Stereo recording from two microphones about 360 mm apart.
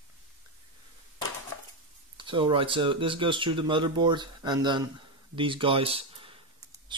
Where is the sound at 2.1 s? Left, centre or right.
Centre.